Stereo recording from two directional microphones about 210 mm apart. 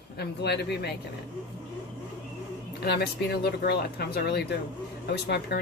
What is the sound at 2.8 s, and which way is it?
Speech, 50° left (ahead or behind).